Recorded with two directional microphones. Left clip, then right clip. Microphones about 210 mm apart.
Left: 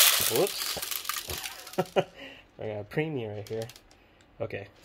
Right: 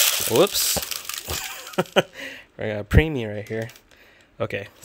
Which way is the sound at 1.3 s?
45° right (ahead or behind).